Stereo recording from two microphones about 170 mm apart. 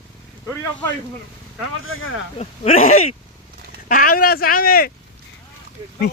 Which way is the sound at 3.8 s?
55° left (ahead or behind).